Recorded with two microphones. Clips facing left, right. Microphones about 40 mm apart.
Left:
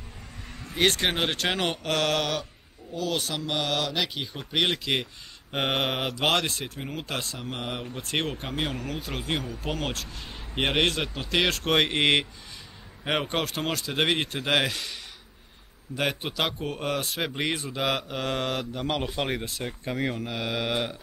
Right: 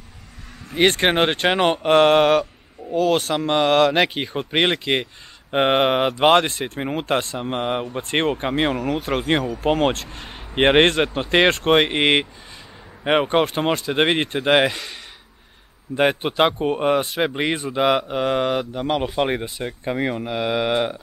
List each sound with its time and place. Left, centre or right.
0.7 s speech: right
10.2 s a sound: right
10.6 s speech: right
11.7 s speech: centre
16.0 s speech: right